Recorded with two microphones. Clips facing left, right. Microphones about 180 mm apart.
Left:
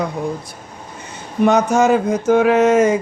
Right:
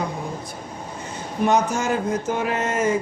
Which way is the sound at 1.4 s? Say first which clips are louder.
Left 7 dB; 80° left.